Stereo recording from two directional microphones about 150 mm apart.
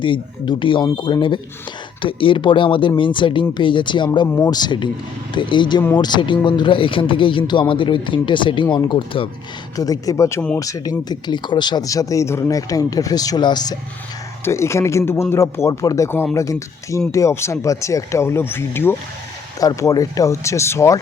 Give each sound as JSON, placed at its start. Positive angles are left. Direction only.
{"t": 0.0, "sound": "speech", "side_deg": 35}
{"t": 4.3, "sound": "speech", "side_deg": 15}
{"t": 4.5, "sound": "speech", "side_deg": 30}
{"t": 9.7, "sound": "speech", "side_deg": 25}